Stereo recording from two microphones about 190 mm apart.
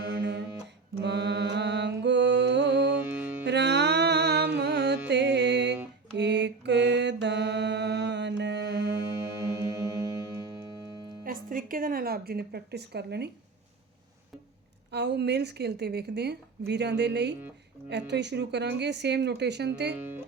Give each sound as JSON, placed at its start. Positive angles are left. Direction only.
{"t": 1.0, "sound": "music", "side_deg": -65}
{"t": 3.0, "sound": "music", "side_deg": -10}
{"t": 3.4, "sound": "music", "side_deg": -65}
{"t": 4.5, "sound": "carnatic music", "side_deg": -65}
{"t": 5.0, "sound": "music", "side_deg": -65}
{"t": 6.1, "sound": "mantra", "side_deg": -65}
{"t": 9.2, "sound": "music", "side_deg": -15}
{"t": 11.3, "sound": "a sound", "side_deg": -45}
{"t": 14.8, "sound": "a woman's voice", "side_deg": -65}
{"t": 19.9, "sound": "music", "side_deg": -10}